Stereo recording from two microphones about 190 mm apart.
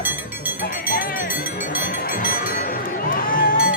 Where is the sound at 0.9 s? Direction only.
50° left (ahead or behind).